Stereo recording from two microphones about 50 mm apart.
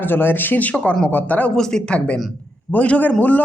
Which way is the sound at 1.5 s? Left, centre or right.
Centre.